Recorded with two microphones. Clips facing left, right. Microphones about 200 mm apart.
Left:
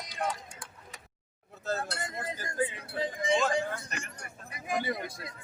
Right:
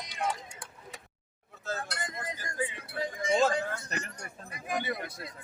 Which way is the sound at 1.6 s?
35° left (ahead or behind).